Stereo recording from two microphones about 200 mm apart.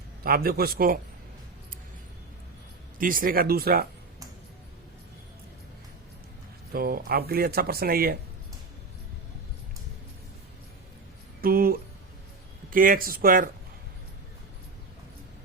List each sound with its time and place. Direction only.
0.2 s speech: 50° right (ahead or behind)
3.0 s speech: 45° right (ahead or behind)
6.7 s speech: 50° right (ahead or behind)
11.3 s speech: 45° right (ahead or behind)